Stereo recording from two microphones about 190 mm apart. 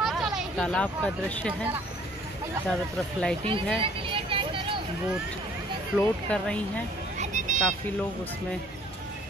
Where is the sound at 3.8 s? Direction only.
30° right (ahead or behind).